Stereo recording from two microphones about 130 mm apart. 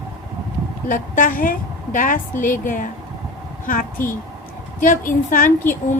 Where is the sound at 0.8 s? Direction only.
90° left.